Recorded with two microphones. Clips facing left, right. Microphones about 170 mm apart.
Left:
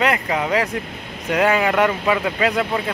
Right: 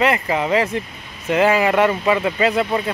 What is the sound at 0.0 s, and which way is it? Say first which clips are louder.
Speech: right 2 dB; centre (ahead or behind).